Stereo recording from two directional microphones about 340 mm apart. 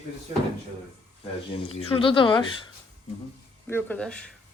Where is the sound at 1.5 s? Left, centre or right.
Centre.